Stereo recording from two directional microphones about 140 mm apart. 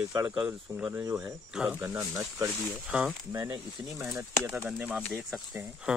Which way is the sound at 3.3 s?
25° right (ahead or behind).